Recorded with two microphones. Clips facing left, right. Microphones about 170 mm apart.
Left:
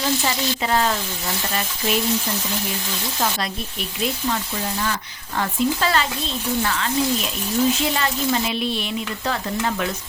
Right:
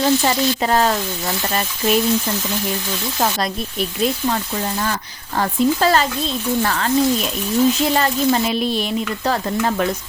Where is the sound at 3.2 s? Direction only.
40° right (ahead or behind).